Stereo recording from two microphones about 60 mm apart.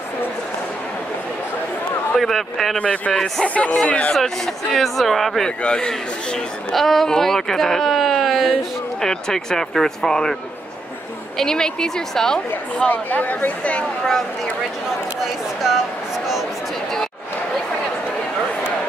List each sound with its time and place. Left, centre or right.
2.1 s speech: centre
2.8 s speech: centre
4.7 s speech: centre
5.6 s speech: centre
6.7 s speech: centre
11.3 s speech: centre
12.7 s speech: left
13.7 s speech: centre